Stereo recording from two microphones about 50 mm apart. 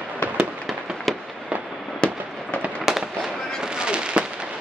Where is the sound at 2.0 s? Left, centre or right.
Left.